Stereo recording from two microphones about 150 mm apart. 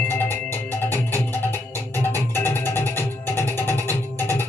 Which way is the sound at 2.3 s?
15° left (ahead or behind).